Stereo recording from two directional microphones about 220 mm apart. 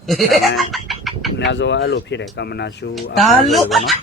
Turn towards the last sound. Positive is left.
turn(degrees=0)  # may be behind; listen again after turning